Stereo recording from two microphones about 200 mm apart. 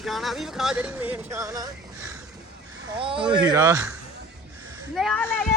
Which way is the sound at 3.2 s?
20° right (ahead or behind).